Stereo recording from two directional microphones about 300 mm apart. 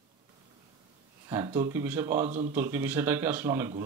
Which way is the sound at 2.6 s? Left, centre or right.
Centre.